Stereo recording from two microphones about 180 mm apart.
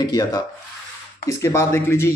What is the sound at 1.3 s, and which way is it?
Speech, 15° left (ahead or behind).